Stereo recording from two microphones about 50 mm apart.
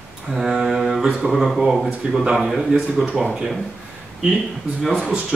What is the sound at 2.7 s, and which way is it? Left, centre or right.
Speech, right.